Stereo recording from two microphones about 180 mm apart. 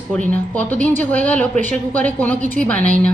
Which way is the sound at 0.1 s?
5° left (ahead or behind).